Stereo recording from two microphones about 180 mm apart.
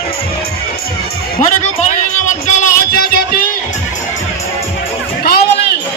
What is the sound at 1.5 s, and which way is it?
Music, 45° left (ahead or behind).